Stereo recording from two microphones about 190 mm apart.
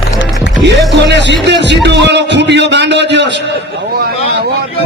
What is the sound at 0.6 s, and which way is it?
A man's voice, 65° right (ahead or behind).